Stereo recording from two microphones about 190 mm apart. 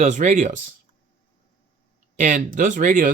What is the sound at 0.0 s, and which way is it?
Speech, 40° right (ahead or behind).